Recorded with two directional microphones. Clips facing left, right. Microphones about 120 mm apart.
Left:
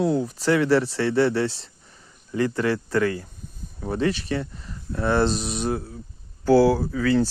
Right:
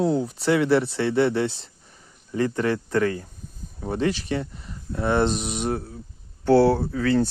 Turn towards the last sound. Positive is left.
turn(degrees=-35)  # may be behind; listen again after turning